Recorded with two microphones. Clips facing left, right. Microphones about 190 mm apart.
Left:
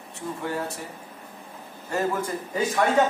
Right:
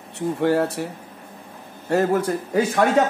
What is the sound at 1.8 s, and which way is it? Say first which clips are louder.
Speech: right 7 dB; 65° right (ahead or behind).